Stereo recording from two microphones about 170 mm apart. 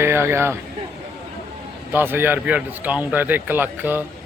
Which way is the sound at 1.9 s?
10° right (ahead or behind).